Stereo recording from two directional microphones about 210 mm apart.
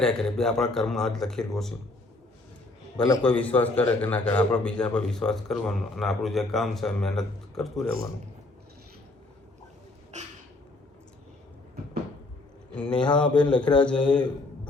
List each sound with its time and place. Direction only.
0.0 s a man's voice: 5° left (ahead or behind)
3.2 s a man's voice: 5° left (ahead or behind)
10.1 s a sound: 35° right (ahead or behind)
12.7 s a man's voice: 5° left (ahead or behind)